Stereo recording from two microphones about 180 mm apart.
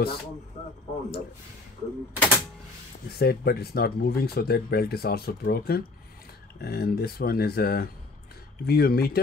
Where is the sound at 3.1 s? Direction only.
60° left (ahead or behind).